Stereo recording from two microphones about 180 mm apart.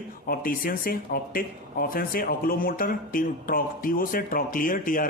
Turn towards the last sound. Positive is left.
turn(degrees=50)  # may be behind; listen again after turning